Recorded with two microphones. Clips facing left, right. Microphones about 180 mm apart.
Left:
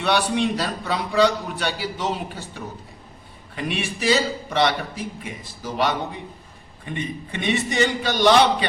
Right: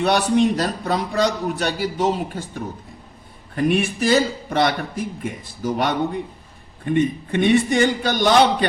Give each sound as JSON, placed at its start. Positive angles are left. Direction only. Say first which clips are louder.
{"t": 0.0, "sound": "a man's voice", "louder": "right 4 dB", "side_deg": -45}